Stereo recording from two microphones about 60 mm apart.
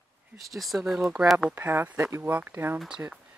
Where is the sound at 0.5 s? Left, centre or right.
Centre.